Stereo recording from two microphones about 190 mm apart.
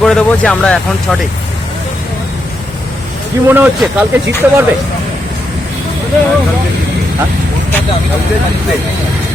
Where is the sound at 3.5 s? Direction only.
10° right (ahead or behind).